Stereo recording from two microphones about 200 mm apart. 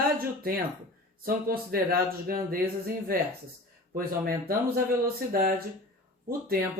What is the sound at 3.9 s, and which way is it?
Speech, 45° right (ahead or behind).